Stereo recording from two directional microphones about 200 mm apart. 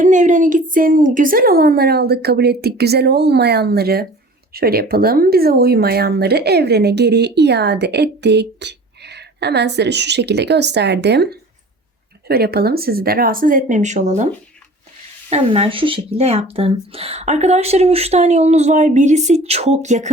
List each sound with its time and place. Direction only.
0.0 s a woman's voice: 40° right (ahead or behind)
15.3 s speech: 30° right (ahead or behind)